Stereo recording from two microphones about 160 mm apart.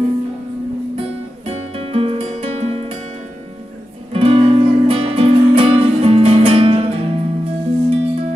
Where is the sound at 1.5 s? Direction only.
40° right (ahead or behind).